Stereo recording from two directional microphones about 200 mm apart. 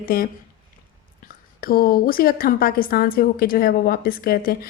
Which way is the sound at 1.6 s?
50° left (ahead or behind).